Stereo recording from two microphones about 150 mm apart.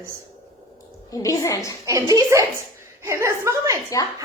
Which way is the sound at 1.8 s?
20° right (ahead or behind).